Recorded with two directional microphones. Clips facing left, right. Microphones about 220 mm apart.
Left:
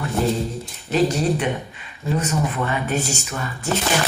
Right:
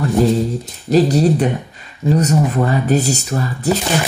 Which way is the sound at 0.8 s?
35° right (ahead or behind).